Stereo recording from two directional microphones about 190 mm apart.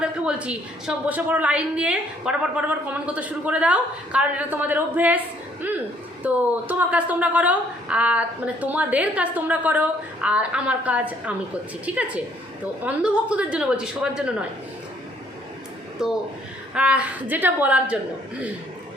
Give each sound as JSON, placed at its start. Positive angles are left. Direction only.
{"t": 0.0, "sound": "a woman's voice", "side_deg": -5}
{"t": 6.2, "sound": "a woman's voice", "side_deg": -10}
{"t": 16.0, "sound": "a woman's voice", "side_deg": -5}